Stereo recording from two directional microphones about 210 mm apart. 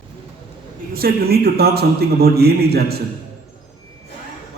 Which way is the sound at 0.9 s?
45° right (ahead or behind).